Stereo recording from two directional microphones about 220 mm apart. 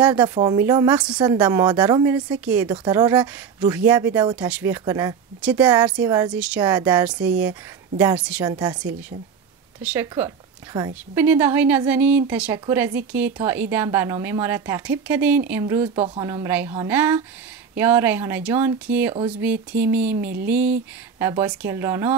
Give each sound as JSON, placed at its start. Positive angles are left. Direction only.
{"t": 0.3, "sound": "a woman's voice", "side_deg": -20}
{"t": 1.1, "sound": "a woman's voice", "side_deg": -20}
{"t": 2.3, "sound": "a woman's voice", "side_deg": -5}
{"t": 8.5, "sound": "a woman's voice", "side_deg": -20}
{"t": 9.8, "sound": "a woman's voice", "side_deg": -10}